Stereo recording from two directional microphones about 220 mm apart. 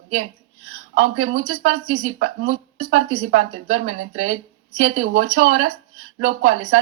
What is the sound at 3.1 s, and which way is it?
Speech, 35° right (ahead or behind).